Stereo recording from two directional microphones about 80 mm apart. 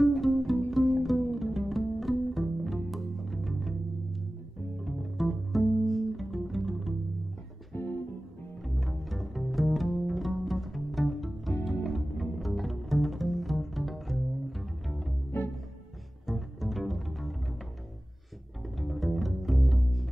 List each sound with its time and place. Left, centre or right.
0.0 s music: centre
4.8 s music: centre
7.7 s music: left
8.6 s bowed string instrument: centre
16.3 s bowed string instrument: centre
18.8 s music: centre